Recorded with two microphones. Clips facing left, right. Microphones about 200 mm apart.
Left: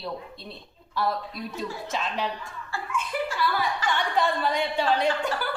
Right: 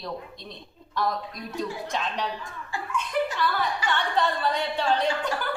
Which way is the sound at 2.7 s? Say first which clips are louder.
Right 1 dB; 15° right (ahead or behind).